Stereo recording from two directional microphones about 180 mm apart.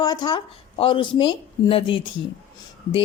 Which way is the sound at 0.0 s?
25° left (ahead or behind).